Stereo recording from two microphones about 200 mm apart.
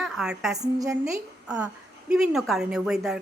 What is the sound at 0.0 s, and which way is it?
Speech, centre (ahead or behind).